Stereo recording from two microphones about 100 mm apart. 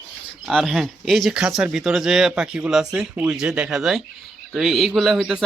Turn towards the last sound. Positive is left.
turn(degrees=-5)  # may be behind; listen again after turning